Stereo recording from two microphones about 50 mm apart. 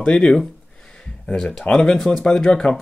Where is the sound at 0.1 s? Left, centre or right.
Centre.